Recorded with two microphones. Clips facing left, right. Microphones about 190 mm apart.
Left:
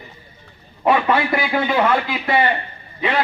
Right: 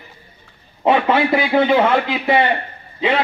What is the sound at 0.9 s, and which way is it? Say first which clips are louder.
A man's voice: right 2 dB; 25° right (ahead or behind).